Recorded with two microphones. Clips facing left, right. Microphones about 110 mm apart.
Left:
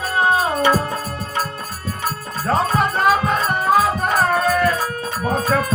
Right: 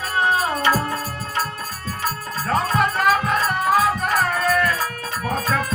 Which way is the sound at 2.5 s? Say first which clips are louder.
Left 2 dB; 30° left (ahead or behind).